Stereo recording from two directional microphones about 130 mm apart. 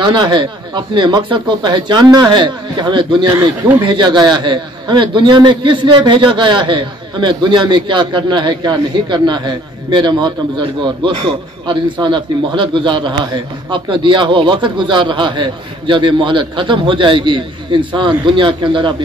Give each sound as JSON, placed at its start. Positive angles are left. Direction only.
{"t": 0.0, "sound": "a man's voice", "side_deg": -35}
{"t": 11.6, "sound": "a man's voice", "side_deg": -40}